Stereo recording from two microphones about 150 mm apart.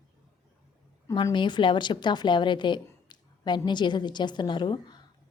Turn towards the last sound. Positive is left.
turn(degrees=30)  # may be behind; listen again after turning